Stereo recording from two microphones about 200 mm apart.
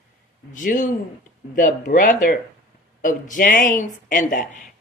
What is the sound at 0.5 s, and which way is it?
Speech, 40° left (ahead or behind).